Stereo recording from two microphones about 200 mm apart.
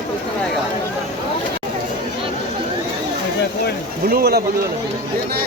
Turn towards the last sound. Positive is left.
turn(degrees=-50)  # may be behind; listen again after turning